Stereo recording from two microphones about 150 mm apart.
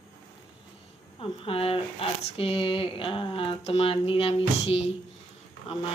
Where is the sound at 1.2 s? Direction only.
40° left (ahead or behind).